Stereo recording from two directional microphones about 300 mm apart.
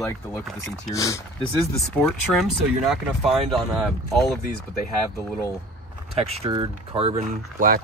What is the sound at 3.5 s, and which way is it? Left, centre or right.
Speech, centre.